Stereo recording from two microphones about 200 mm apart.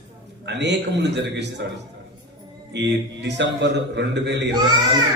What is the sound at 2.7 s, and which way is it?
A man's voice, 60° right (ahead or behind).